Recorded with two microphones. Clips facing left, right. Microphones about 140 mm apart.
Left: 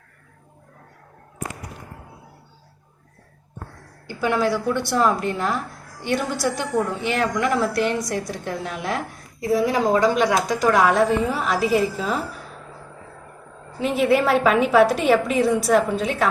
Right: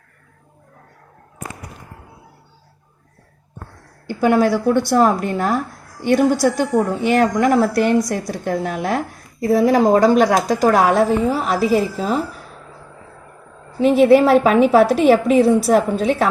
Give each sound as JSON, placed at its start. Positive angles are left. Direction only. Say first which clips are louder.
{"t": 4.0, "sound": "a woman's voice", "louder": "right 6 dB", "side_deg": -45}
{"t": 14.0, "sound": "a woman's voice", "louder": "right 6 dB", "side_deg": -40}